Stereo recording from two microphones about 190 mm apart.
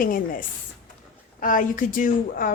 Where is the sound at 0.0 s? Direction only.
45° left (ahead or behind).